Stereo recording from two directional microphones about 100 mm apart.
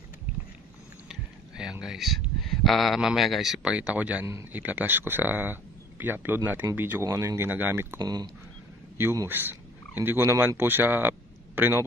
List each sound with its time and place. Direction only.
1.6 s speech: 5° right (ahead or behind); by 8.0 s 25° right (ahead or behind)
8.0 s speech: 45° right (ahead or behind)
8.9 s a man's voice: 30° right (ahead or behind)